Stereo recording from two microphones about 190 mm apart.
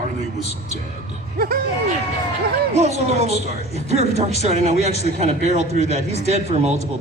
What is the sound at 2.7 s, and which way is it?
A man's voice, 35° right (ahead or behind).